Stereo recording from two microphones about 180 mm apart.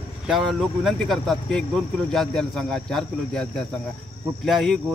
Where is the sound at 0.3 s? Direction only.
Centre (ahead or behind).